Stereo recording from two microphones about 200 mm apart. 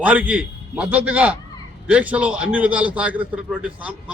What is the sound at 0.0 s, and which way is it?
A man's voice, 5° right (ahead or behind).